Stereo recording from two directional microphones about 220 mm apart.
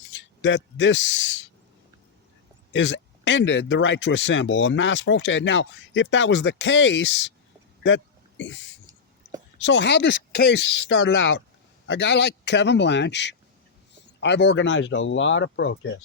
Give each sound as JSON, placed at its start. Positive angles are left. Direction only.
{"t": 0.1, "sound": "speech", "side_deg": 55}
{"t": 2.7, "sound": "speech", "side_deg": 55}